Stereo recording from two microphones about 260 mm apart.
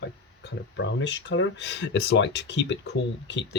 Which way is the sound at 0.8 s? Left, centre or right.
Left.